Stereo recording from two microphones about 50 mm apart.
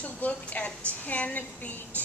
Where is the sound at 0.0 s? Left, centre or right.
Left.